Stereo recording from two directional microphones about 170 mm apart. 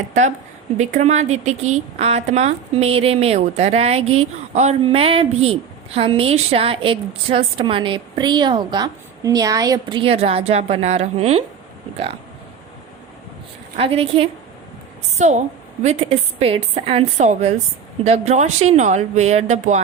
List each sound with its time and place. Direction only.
0.1 s a woman's voice: 45° right (ahead or behind)
13.7 s a woman's voice: 35° right (ahead or behind)